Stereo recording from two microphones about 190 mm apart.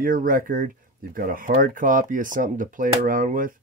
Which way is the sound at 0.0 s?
45° right (ahead or behind).